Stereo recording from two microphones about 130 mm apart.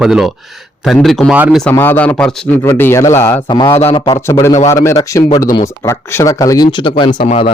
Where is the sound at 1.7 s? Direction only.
15° left (ahead or behind).